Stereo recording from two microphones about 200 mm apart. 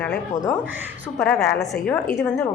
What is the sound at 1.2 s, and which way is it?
Speech, 5° left (ahead or behind).